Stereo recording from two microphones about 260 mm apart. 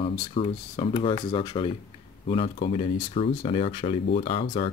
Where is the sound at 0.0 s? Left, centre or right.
Left.